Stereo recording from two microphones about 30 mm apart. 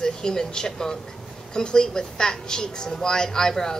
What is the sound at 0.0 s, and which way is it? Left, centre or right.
Speech, centre.